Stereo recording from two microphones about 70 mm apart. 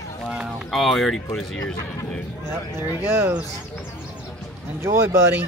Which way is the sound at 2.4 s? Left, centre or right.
Right.